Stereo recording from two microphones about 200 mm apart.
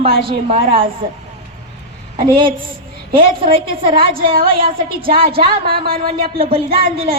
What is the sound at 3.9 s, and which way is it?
A woman's voice, 45° right (ahead or behind).